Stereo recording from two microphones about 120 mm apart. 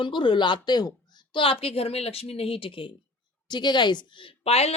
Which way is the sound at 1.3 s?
50° left (ahead or behind).